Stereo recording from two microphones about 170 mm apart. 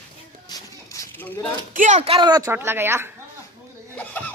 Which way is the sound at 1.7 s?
45° right (ahead or behind).